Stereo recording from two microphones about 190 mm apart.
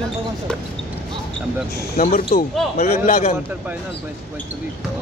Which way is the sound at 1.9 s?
45° left (ahead or behind).